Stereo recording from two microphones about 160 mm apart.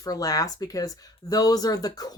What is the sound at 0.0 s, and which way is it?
Speech, 20° left (ahead or behind).